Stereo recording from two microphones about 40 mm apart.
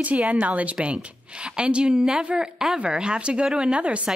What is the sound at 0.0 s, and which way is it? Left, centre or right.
Speech, right.